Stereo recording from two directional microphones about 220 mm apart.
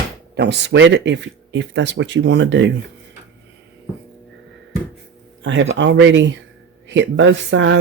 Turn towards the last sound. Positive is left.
turn(degrees=-55)  # may be behind; listen again after turning